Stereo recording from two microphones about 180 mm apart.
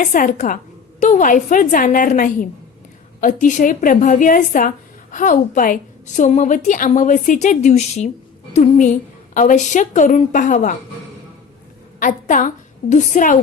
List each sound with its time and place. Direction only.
0.0 s a woman's voice: 45° left (ahead or behind)
11.9 s a woman's voice: 45° left (ahead or behind)